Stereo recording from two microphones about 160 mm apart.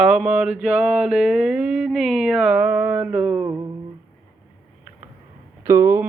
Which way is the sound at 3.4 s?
20° right (ahead or behind).